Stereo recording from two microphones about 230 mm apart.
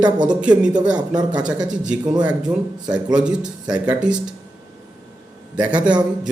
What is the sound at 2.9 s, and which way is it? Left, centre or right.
Speech, centre.